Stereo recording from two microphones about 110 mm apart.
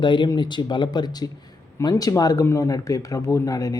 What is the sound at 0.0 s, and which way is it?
Speech, 45° left (ahead or behind).